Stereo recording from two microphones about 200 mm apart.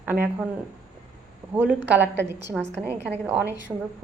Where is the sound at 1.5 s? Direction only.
10° right (ahead or behind).